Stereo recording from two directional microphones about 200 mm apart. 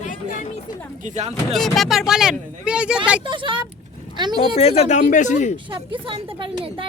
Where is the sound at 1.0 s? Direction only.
35° right (ahead or behind).